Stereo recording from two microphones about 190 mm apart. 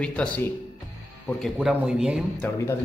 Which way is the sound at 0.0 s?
5° left (ahead or behind).